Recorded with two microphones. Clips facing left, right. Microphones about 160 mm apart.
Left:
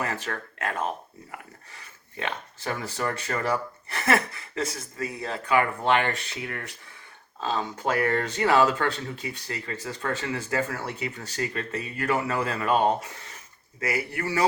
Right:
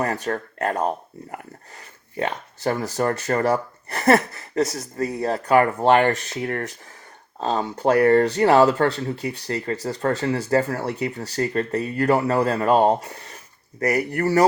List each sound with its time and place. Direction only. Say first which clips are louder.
0.0 s speech: right 7 dB; 35° right (ahead or behind)